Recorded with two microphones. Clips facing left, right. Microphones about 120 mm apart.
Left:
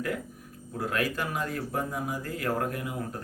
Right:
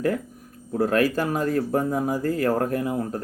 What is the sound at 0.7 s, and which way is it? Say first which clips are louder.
Speech: right 9 dB; 40° right (ahead or behind).